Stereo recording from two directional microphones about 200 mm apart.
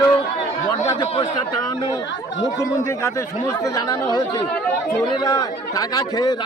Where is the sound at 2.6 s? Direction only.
15° left (ahead or behind).